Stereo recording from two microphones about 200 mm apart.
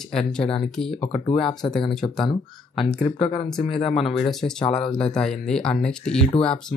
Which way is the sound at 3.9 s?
Centre (ahead or behind).